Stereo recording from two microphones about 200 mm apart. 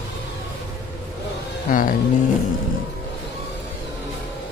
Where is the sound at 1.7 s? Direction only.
45° left (ahead or behind).